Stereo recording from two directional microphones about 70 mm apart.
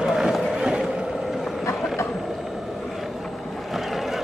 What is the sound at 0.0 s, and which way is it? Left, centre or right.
Run, centre.